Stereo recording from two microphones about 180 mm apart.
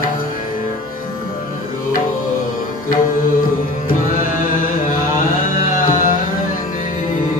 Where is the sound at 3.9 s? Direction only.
50° left (ahead or behind).